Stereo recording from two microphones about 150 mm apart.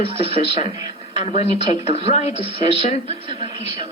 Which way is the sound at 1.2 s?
45° left (ahead or behind).